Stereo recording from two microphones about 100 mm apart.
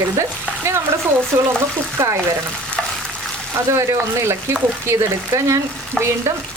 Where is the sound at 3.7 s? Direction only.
25° right (ahead or behind).